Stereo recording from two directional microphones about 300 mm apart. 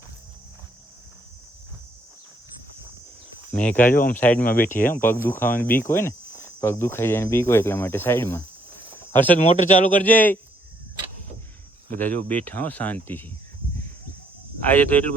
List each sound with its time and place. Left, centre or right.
3.5 s speech: centre
8.9 s cricket: centre
9.4 s a man's voice: left
10.0 s speech: centre
11.9 s speech: centre
14.7 s speech: centre